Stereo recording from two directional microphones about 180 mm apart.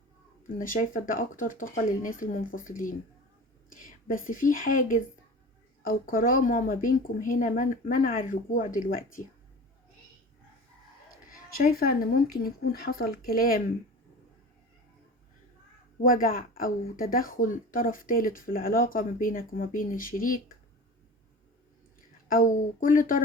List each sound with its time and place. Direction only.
0.4 s speech: 50° left (ahead or behind)
11.5 s speech: 55° left (ahead or behind)
16.0 s speech: 50° left (ahead or behind)
22.3 s speech: 50° left (ahead or behind)